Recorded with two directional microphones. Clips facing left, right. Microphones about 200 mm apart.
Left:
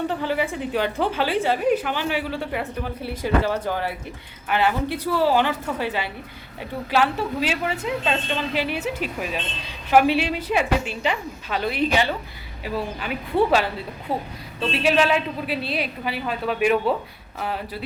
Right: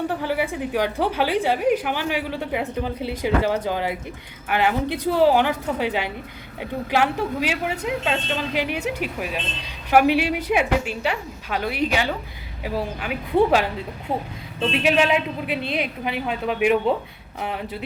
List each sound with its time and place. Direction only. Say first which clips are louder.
0.1 s a woman's voice: even; 10° right (ahead or behind)
8.5 s a woman's voice: right 2 dB; 15° right (ahead or behind)